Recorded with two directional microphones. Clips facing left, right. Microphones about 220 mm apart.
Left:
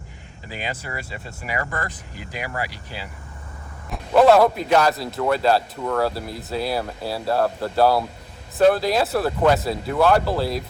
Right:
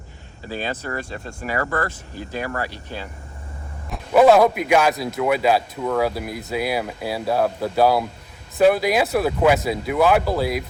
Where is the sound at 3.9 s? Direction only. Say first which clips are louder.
Right 1 dB; 5° right (ahead or behind).